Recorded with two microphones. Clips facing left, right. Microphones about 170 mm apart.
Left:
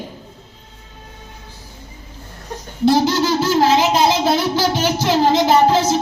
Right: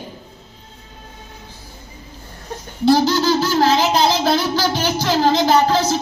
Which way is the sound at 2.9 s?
25° left (ahead or behind).